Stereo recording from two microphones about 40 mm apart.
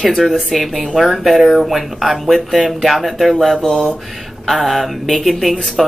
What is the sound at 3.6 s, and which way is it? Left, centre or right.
Mantra, centre.